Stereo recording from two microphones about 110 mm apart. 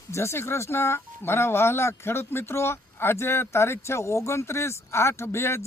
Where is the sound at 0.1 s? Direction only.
25° left (ahead or behind).